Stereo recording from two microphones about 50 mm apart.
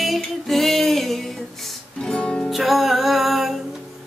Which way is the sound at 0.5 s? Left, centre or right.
Centre.